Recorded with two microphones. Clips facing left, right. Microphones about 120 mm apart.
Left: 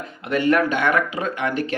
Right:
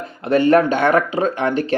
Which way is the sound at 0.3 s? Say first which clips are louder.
Right 5 dB; 30° right (ahead or behind).